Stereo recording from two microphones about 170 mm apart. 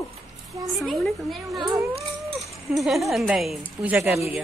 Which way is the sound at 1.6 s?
20° right (ahead or behind).